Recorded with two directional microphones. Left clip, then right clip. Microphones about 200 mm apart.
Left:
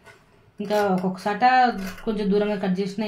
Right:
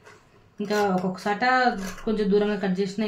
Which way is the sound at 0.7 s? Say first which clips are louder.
Left 2 dB; 20° left (ahead or behind).